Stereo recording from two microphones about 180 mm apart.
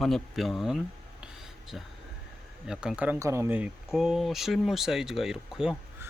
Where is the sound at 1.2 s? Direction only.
Centre (ahead or behind).